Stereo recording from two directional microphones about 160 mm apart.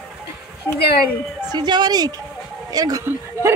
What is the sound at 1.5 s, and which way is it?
A woman's voice, 25° right (ahead or behind).